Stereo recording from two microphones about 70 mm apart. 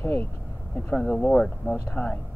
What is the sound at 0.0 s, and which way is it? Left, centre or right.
Speech, left.